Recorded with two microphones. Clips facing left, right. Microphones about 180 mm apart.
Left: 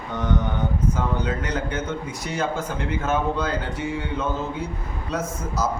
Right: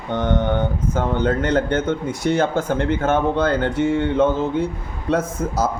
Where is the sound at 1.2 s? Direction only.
55° right (ahead or behind).